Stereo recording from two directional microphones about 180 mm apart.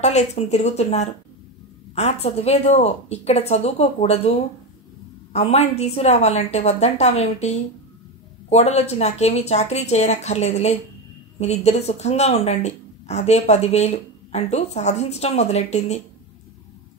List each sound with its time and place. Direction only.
0.0 s speech: 40° left (ahead or behind)